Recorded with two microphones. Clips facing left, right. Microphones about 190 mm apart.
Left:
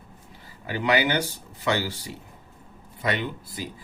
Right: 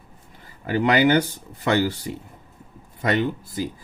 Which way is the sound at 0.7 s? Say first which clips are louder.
Right 6 dB; 50° right (ahead or behind).